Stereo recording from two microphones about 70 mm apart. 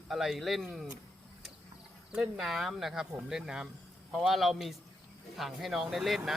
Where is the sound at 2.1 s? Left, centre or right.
Centre.